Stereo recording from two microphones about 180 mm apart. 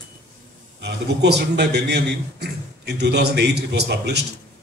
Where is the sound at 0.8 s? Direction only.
65° right (ahead or behind).